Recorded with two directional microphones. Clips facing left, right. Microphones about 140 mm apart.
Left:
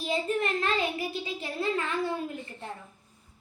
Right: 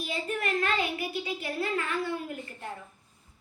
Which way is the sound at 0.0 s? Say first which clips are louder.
Left 4 dB; 25° left (ahead or behind).